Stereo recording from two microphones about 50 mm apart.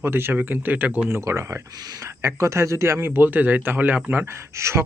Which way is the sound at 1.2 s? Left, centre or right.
Right.